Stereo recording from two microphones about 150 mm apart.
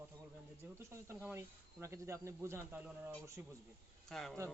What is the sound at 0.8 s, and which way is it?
Speech, 20° right (ahead or behind).